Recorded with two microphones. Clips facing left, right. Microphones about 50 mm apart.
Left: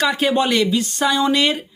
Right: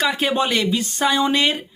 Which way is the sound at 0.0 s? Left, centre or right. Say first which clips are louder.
Left 2 dB; centre.